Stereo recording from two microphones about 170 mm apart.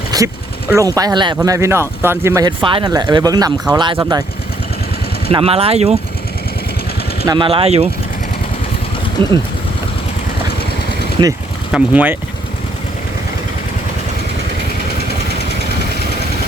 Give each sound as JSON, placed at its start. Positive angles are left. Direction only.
{"t": 0.1, "sound": "a sound", "side_deg": -20}
{"t": 0.7, "sound": "speech", "side_deg": -20}
{"t": 1.4, "sound": "speech", "side_deg": -15}
{"t": 2.6, "sound": "speech", "side_deg": -30}
{"t": 5.3, "sound": "speech", "side_deg": -35}
{"t": 7.3, "sound": "speech", "side_deg": -30}
{"t": 9.2, "sound": "speech", "side_deg": -30}
{"t": 11.2, "sound": "speech", "side_deg": -30}
{"t": 11.7, "sound": "speech", "side_deg": -10}